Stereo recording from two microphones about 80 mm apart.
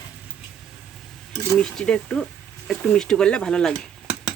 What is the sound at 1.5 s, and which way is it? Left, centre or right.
Speech, centre.